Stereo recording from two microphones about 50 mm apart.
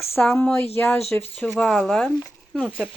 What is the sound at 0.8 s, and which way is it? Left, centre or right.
Speech, left.